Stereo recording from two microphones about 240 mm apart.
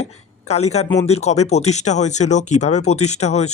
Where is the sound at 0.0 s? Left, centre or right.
Left.